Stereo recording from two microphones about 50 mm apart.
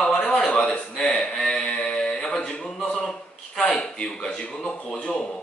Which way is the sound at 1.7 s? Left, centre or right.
Left.